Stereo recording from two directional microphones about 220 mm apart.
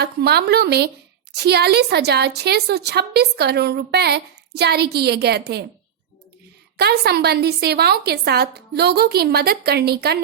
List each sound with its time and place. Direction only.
0.0 s a woman's voice: 45° right (ahead or behind)
6.7 s a woman's voice: 45° right (ahead or behind)